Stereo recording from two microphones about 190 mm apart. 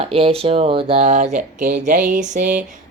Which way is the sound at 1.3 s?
40° right (ahead or behind).